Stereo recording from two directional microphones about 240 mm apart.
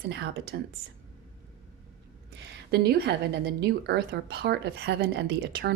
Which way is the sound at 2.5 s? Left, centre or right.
Right.